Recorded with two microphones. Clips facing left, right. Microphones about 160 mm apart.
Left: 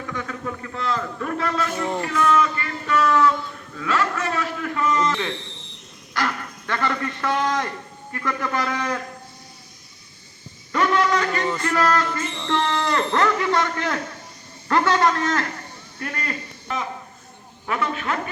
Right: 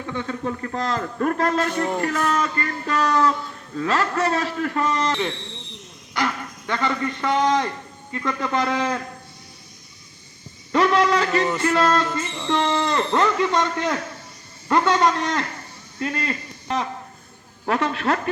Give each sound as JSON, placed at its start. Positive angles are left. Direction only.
{"t": 0.1, "sound": "a man's voice", "side_deg": -25}
{"t": 0.6, "sound": "a man's voice", "side_deg": -40}
{"t": 1.7, "sound": "speech", "side_deg": 5}
{"t": 2.0, "sound": "a man's voice", "side_deg": -45}
{"t": 6.1, "sound": "a man's voice", "side_deg": -15}
{"t": 10.7, "sound": "a sound", "side_deg": -35}
{"t": 11.5, "sound": "a man's voice", "side_deg": -25}
{"t": 17.7, "sound": "a man's voice", "side_deg": -40}